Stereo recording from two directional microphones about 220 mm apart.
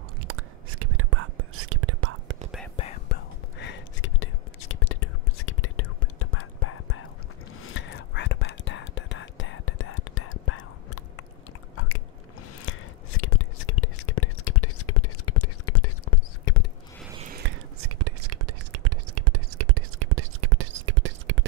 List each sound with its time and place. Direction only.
0.2 s whispering: 80° right
2.7 s whispering: 25° left (ahead or behind)
3.1 s whispering: 50° left (ahead or behind); by 7.1 s 75° left (ahead or behind)
7.6 s whispering: 55° left (ahead or behind); by 11.2 s 80° left
13.2 s whispering: 65° left (ahead or behind)
17.2 s whispering: 40° right (ahead or behind)
17.8 s whispering: 90° right; by 21.5 s 55° right (ahead or behind)